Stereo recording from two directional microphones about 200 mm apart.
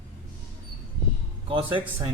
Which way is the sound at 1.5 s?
25° right (ahead or behind).